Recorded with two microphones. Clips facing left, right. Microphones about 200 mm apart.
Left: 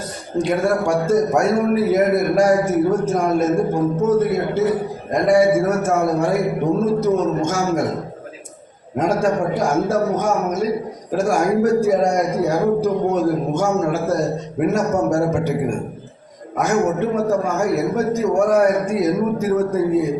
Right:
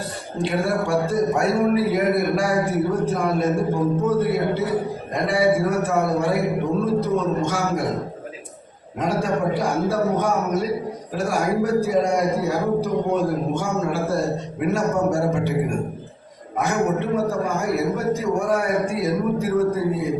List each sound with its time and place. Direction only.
0.3 s a man's voice: 45° left (ahead or behind)
9.0 s a man's voice: 45° left (ahead or behind)
16.6 s a man's voice: 45° left (ahead or behind)